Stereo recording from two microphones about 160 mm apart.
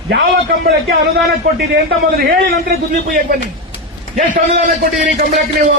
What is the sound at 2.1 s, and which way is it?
A man's voice, 75° right (ahead or behind).